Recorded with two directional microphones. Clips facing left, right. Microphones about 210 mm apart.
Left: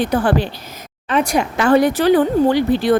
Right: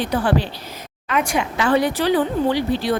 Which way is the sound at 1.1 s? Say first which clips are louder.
Left 4 dB; 35° left (ahead or behind).